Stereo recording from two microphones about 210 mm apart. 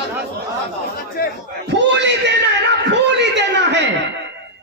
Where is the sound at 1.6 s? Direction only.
55° right (ahead or behind).